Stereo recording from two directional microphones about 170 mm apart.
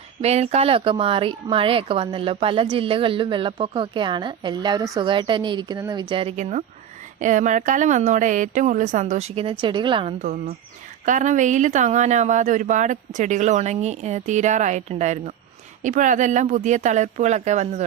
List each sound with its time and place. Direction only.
0.2 s speech: 40° right (ahead or behind)
10.2 s speech: 50° right (ahead or behind)